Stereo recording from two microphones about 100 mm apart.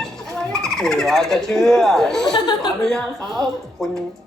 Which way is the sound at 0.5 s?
5° left (ahead or behind).